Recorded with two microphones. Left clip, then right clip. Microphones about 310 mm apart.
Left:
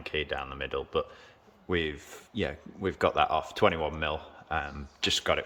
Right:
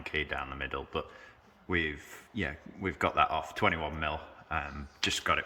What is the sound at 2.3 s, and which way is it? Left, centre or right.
Speech, centre.